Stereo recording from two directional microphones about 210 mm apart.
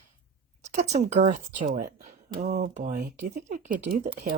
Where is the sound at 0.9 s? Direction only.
35° right (ahead or behind).